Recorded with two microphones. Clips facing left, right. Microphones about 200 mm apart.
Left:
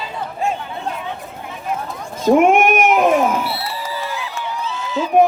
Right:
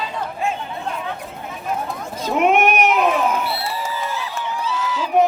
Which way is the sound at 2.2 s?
50° left (ahead or behind).